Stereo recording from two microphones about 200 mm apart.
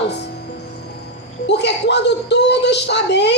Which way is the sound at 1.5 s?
60° left (ahead or behind).